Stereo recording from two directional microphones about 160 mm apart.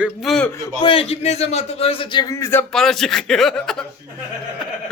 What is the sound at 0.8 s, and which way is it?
A man's voice, 35° left (ahead or behind).